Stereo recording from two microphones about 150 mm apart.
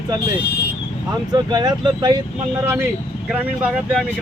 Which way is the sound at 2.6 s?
15° right (ahead or behind).